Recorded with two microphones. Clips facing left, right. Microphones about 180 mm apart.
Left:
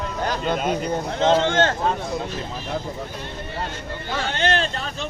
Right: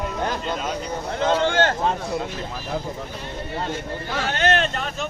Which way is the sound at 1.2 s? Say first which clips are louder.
Left 2 dB; 25° left (ahead or behind).